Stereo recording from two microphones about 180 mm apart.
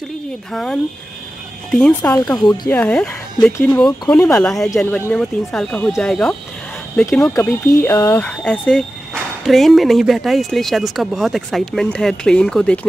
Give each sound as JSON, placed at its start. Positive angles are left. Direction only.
{"t": 0.5, "sound": "speech", "side_deg": 0}
{"t": 2.4, "sound": "speech", "side_deg": 25}
{"t": 2.7, "sound": "speech", "side_deg": 10}